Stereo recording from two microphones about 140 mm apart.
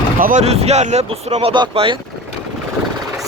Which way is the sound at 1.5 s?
35° right (ahead or behind).